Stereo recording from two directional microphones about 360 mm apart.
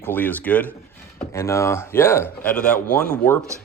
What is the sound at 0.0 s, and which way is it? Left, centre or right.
Speech, centre.